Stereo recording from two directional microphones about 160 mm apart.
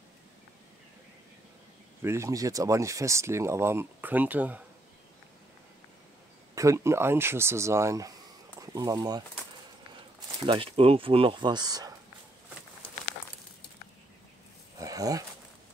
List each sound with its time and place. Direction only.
2.0 s speech: 15° right (ahead or behind)
6.5 s speech: 20° right (ahead or behind)
10.4 s speech: 35° right (ahead or behind)
14.8 s a sound: 20° right (ahead or behind)